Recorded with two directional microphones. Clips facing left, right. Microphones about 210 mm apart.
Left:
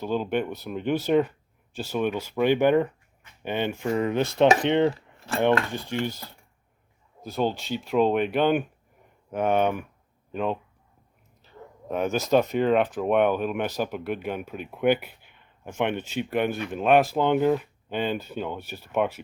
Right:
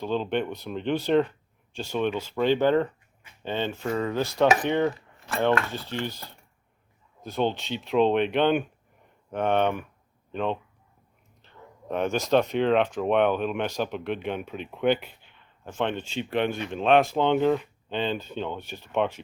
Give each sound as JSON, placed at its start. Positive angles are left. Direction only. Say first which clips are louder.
{"t": 0.0, "sound": "speech", "louder": "left 1 dB", "side_deg": 10}